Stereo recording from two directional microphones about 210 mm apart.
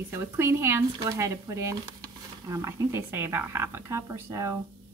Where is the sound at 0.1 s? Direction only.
10° right (ahead or behind).